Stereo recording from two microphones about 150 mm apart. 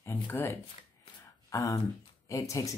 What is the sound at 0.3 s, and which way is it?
Speech, 15° left (ahead or behind).